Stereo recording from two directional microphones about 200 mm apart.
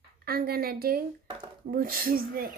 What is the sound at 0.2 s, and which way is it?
A child's voice, 50° right (ahead or behind).